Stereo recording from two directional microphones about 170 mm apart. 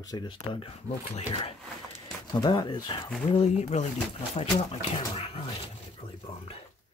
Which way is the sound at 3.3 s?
40° left (ahead or behind).